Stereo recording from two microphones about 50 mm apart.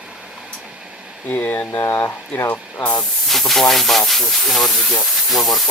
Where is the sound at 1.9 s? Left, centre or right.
Left.